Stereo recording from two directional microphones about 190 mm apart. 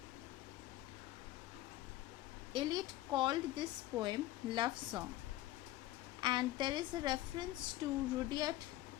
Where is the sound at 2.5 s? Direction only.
25° right (ahead or behind).